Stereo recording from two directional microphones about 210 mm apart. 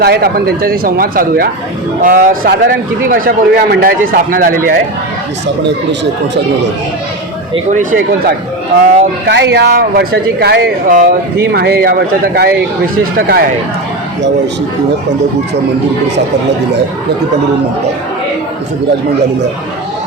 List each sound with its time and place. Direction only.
0.0 s speech: 50° right (ahead or behind)
7.5 s speech: 35° right (ahead or behind)
9.2 s speech: 55° right (ahead or behind)